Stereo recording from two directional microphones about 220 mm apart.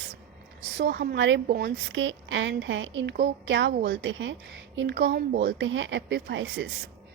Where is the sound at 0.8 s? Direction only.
50° right (ahead or behind).